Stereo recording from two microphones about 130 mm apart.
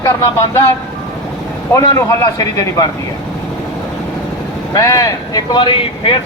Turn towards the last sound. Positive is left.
turn(degrees=40)  # may be behind; listen again after turning